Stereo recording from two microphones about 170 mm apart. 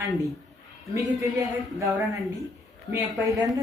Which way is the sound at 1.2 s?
20° right (ahead or behind).